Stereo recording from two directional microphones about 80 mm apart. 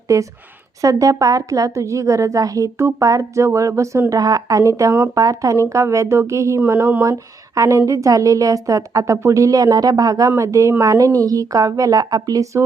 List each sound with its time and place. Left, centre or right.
0.1 s a woman's voice: right
6.7 s speech: right
7.0 s a woman's voice: right